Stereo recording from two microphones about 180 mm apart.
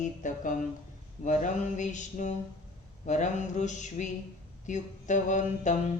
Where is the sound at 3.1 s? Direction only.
40° left (ahead or behind).